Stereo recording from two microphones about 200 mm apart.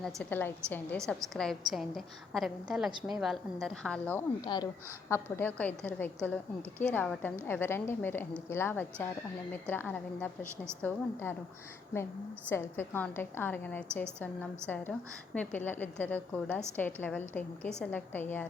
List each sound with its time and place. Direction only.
0.0 s a woman's voice: 5° left (ahead or behind)
4.4 s a woman's voice: 20° left (ahead or behind)
12.5 s a woman's voice: 10° left (ahead or behind)
15.4 s a woman's voice: 10° left (ahead or behind)